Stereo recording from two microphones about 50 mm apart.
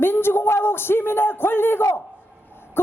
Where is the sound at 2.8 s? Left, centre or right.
Left.